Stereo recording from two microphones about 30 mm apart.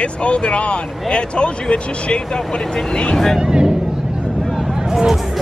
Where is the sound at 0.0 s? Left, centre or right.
Left.